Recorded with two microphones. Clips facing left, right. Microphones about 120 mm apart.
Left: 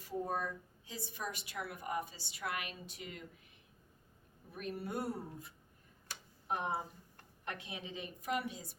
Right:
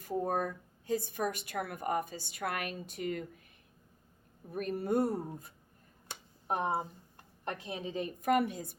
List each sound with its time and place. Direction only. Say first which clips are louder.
0.0 s a woman's voice: right 5 dB; 50° right (ahead or behind)
4.5 s a woman's voice: right 9 dB; 45° right (ahead or behind)